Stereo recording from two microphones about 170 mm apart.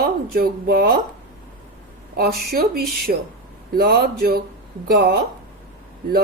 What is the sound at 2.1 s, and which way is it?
A woman's voice, 65° right (ahead or behind).